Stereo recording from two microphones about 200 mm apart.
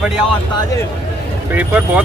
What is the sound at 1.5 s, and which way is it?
Speech, 5° right (ahead or behind).